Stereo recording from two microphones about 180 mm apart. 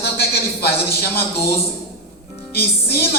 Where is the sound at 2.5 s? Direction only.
60° left (ahead or behind).